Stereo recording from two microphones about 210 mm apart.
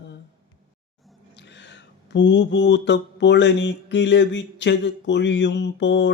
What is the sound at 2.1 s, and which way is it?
Mantra, 55° left (ahead or behind).